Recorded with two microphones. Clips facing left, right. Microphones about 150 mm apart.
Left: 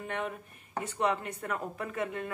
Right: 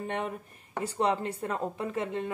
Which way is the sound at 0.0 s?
30° right (ahead or behind).